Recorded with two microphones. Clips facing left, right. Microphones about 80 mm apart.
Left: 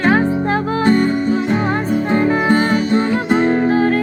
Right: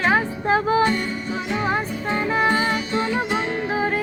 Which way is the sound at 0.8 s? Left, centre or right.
Left.